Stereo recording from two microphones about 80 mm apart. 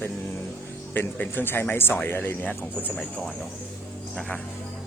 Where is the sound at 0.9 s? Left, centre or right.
Left.